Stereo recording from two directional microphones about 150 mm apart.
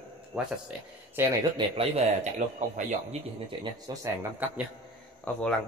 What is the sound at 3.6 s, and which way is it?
Speech, 20° right (ahead or behind).